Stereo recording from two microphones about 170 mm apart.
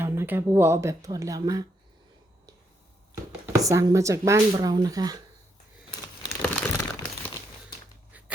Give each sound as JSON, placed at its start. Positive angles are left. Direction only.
{"t": 0.0, "sound": "speech", "side_deg": -10}
{"t": 3.4, "sound": "speech", "side_deg": -20}
{"t": 6.4, "sound": "crumpling", "side_deg": 10}